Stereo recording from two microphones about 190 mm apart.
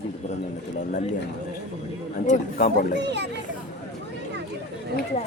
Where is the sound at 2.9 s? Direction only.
65° right (ahead or behind).